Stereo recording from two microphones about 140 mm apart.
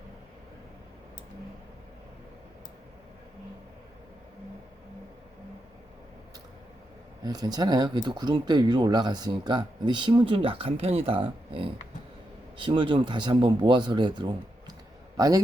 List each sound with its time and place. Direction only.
7.3 s speech: 30° right (ahead or behind)